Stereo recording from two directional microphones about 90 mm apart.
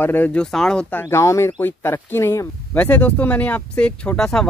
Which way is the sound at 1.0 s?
35° left (ahead or behind).